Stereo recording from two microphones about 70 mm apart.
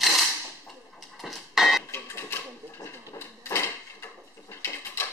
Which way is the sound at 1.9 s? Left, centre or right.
Left.